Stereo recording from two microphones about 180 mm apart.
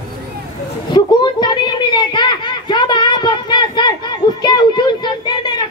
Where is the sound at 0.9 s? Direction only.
25° left (ahead or behind).